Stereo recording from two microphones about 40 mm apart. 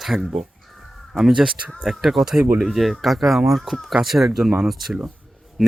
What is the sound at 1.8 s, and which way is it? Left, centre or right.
Speech, centre.